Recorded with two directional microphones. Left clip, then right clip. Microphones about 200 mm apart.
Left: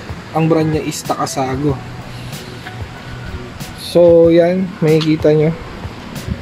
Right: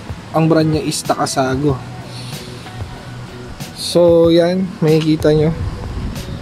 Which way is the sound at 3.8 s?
10° right (ahead or behind).